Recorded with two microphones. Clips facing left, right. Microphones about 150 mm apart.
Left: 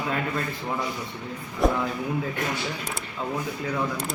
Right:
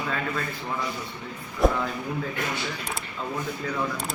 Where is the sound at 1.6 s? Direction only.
Centre (ahead or behind).